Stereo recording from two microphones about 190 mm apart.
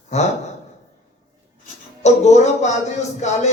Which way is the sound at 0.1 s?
35° left (ahead or behind).